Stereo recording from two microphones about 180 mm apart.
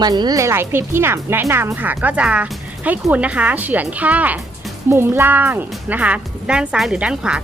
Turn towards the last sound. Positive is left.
turn(degrees=-5)  # may be behind; listen again after turning